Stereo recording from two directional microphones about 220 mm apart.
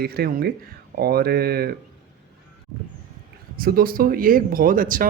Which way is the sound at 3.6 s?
40° right (ahead or behind).